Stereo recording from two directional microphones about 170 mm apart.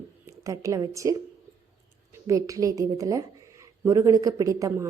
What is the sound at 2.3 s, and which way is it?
A woman's voice, 20° right (ahead or behind).